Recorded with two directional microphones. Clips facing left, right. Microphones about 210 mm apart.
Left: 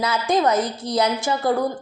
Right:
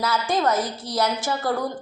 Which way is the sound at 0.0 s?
20° left (ahead or behind).